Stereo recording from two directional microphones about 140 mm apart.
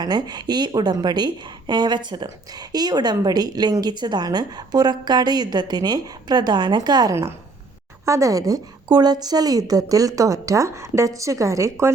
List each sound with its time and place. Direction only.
0.0 s a woman's voice: 30° right (ahead or behind)